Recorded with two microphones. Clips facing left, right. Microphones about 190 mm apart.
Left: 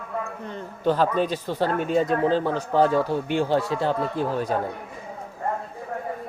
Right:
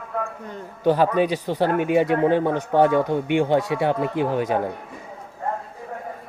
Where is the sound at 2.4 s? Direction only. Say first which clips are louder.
Right 3 dB; 20° right (ahead or behind).